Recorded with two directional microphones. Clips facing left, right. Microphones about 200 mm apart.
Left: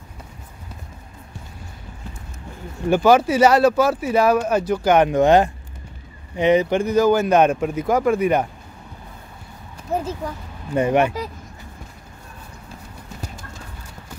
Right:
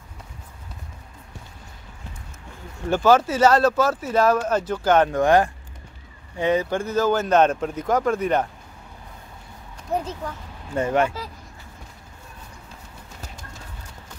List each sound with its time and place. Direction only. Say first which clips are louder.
2.9 s speech: left 3 dB; 15° left (ahead or behind)
9.8 s speech: left 2 dB; 5° left (ahead or behind)